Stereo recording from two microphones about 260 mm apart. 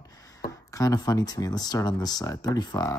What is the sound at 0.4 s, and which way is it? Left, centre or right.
Speech, centre.